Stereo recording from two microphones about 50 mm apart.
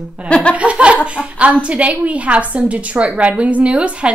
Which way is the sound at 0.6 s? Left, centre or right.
Right.